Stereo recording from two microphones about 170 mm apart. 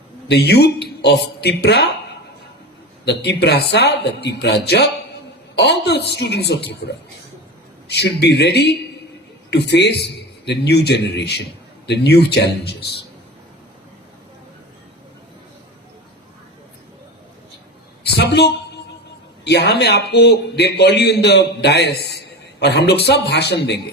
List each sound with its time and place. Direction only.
0.3 s a man's voice: 75° left (ahead or behind)
3.0 s a man's voice: 80° left
18.0 s a man's voice: 80° left